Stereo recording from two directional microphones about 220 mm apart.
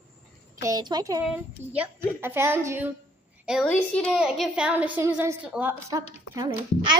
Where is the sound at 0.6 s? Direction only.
15° right (ahead or behind).